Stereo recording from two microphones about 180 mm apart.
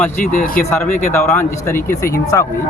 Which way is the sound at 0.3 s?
45° left (ahead or behind).